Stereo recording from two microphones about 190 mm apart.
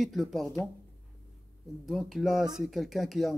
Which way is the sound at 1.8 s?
Centre (ahead or behind).